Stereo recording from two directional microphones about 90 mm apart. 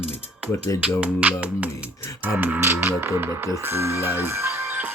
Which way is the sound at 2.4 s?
25° right (ahead or behind).